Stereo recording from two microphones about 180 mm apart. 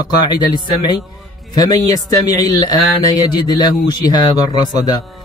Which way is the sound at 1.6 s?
20° left (ahead or behind).